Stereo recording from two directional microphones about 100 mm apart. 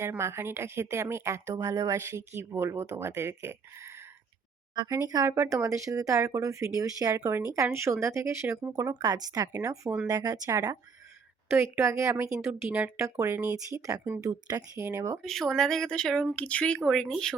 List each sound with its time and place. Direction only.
0.0 s a woman's voice: 25° right (ahead or behind)
4.7 s a woman's voice: 40° right (ahead or behind)
8.7 s speech: 40° right (ahead or behind)
11.4 s a woman's voice: 20° right (ahead or behind)
13.0 s speech: 30° right (ahead or behind)
14.8 s a woman's voice: 25° right (ahead or behind)
15.2 s speech: 5° left (ahead or behind)